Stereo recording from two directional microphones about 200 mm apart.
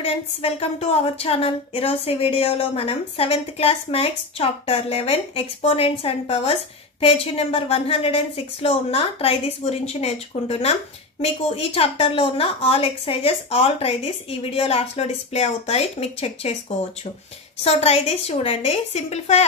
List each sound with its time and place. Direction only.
0.0 s a woman's voice: 30° left (ahead or behind)
17.6 s a woman's voice: 30° left (ahead or behind)